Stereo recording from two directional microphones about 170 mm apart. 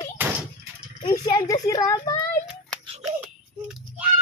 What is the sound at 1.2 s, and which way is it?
A child's voice, 25° left (ahead or behind).